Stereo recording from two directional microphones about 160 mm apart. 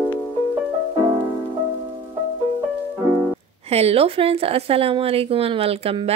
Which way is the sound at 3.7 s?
40° right (ahead or behind).